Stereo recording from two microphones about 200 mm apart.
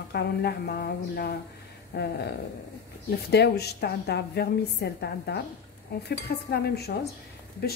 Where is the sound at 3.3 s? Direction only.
55° left (ahead or behind).